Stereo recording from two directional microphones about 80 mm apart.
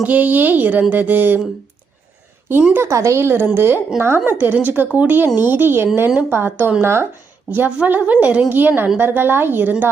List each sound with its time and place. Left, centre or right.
0.0 s a woman's voice: centre
2.7 s a woman's voice: right